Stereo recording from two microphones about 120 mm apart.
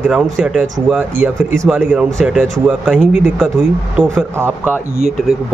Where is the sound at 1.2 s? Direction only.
20° right (ahead or behind); by 4.2 s 5° right (ahead or behind).